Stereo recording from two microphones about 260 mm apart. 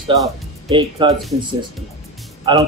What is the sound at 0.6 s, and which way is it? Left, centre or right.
Speech, centre.